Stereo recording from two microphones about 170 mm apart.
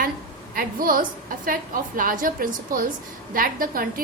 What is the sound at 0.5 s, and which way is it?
A woman's voice, 55° right (ahead or behind).